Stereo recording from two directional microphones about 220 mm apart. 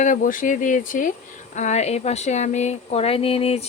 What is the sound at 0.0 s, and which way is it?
Speech, 35° left (ahead or behind).